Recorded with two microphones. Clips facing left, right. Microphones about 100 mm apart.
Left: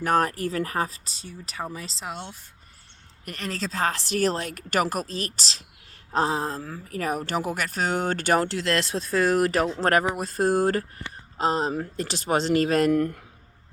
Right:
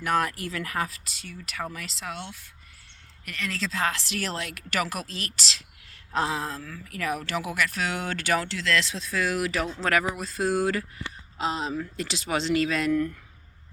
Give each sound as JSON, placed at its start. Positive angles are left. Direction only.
{"t": 0.0, "sound": "a woman's voice", "side_deg": 40}